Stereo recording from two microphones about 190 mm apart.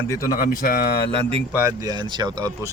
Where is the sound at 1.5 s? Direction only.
15° right (ahead or behind).